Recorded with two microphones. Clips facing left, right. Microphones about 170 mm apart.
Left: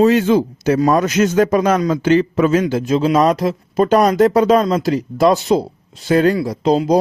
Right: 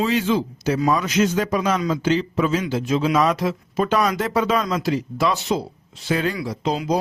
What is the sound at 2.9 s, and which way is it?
A man's voice, 35° left (ahead or behind).